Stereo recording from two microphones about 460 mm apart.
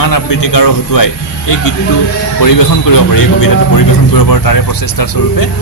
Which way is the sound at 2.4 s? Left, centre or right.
Left.